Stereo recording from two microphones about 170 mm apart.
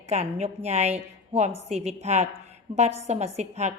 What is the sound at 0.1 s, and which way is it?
A woman's voice, 40° right (ahead or behind).